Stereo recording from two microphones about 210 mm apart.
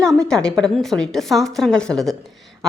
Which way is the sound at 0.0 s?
5° left (ahead or behind).